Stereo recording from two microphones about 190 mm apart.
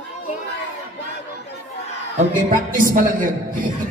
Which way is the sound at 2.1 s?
45° right (ahead or behind).